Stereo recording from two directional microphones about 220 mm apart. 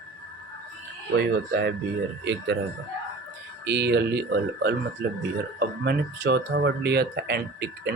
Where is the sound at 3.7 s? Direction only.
50° right (ahead or behind).